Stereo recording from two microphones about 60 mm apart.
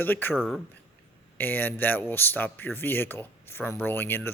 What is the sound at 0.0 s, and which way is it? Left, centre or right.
Speech, left.